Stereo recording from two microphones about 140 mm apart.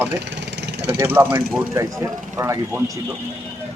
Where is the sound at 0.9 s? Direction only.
15° right (ahead or behind).